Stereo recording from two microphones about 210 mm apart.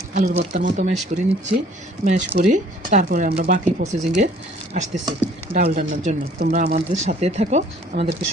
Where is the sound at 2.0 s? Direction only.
35° right (ahead or behind).